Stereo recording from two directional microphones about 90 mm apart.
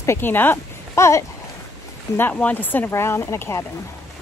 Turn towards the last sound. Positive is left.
turn(degrees=30)  # may be behind; listen again after turning